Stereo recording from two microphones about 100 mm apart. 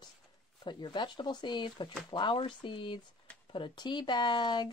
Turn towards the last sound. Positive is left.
turn(degrees=50)  # may be behind; listen again after turning